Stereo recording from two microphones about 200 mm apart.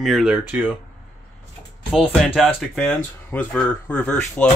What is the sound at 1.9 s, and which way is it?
Speech, 5° right (ahead or behind).